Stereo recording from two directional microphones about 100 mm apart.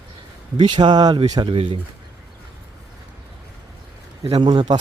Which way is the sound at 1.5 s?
60° right (ahead or behind).